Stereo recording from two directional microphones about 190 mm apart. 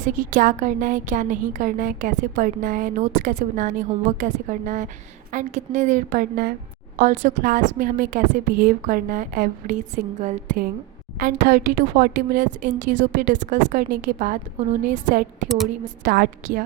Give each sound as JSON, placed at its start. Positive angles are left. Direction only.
{"t": 0.1, "sound": "a woman's voice", "side_deg": -45}
{"t": 11.2, "sound": "a woman's voice", "side_deg": -50}
{"t": 15.4, "sound": "a woman's voice", "side_deg": 0}
{"t": 16.0, "sound": "a woman's voice", "side_deg": -50}